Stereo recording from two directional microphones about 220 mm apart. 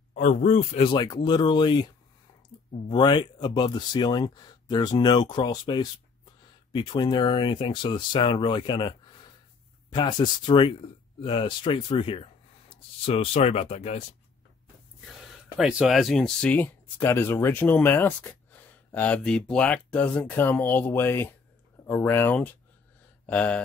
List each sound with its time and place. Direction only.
0.1 s speech: 35° left (ahead or behind)
2.9 s speech: 20° left (ahead or behind)
15.0 s speech: centre (ahead or behind)
23.2 s a sound: 5° left (ahead or behind)